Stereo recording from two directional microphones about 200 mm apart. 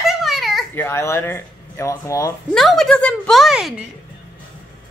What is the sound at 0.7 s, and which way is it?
Speech, 10° left (ahead or behind).